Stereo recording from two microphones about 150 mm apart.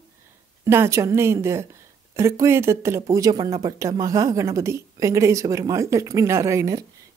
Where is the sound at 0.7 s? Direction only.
20° right (ahead or behind).